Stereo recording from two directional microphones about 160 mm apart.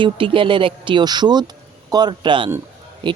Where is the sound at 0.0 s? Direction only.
35° right (ahead or behind).